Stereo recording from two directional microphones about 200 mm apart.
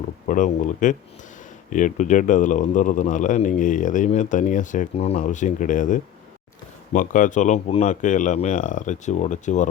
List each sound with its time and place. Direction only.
0.3 s a man's voice: 40° left (ahead or behind)